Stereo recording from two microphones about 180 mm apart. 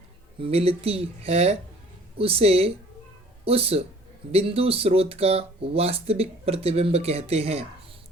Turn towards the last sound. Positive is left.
turn(degrees=-35)  # may be behind; listen again after turning